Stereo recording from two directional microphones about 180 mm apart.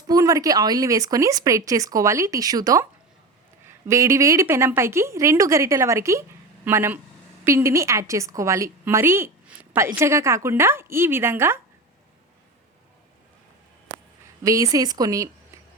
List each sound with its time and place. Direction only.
0.1 s a woman's voice: 20° right (ahead or behind)
14.4 s speech: 20° right (ahead or behind)